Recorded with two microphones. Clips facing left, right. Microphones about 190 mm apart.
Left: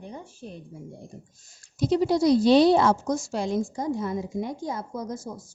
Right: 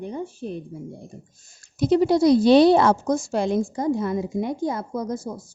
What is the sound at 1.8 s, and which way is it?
A woman's voice, 60° right (ahead or behind).